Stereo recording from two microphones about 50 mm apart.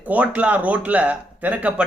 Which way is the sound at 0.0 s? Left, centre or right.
Right.